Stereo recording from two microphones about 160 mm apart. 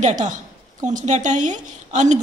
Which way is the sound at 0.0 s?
50° right (ahead or behind).